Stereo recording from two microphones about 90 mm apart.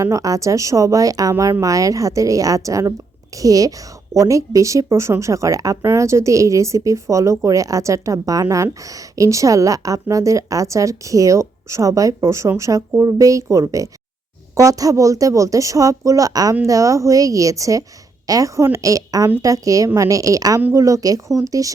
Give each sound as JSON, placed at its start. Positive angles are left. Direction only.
{"t": 0.0, "sound": "a woman's voice", "side_deg": -35}